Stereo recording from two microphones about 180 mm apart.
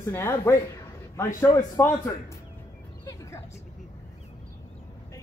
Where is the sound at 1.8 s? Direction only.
15° left (ahead or behind).